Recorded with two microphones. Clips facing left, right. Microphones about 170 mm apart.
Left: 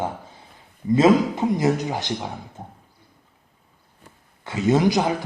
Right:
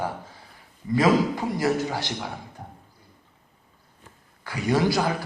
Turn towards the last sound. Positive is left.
turn(degrees=20)  # may be behind; listen again after turning